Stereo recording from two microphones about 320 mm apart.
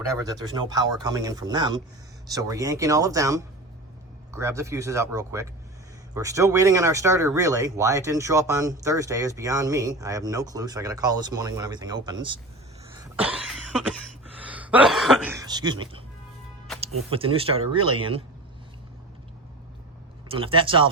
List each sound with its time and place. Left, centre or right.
0.2 s speech: centre
13.0 s cough: centre
14.4 s speech: centre
17.1 s speech: centre
20.2 s speech: centre